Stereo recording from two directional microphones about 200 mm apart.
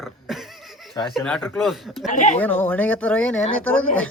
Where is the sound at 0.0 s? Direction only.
Centre (ahead or behind).